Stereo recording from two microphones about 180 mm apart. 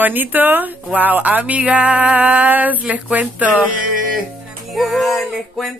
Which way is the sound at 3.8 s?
50° right (ahead or behind).